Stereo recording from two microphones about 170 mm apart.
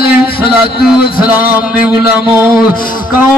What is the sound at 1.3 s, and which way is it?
Music, 10° right (ahead or behind).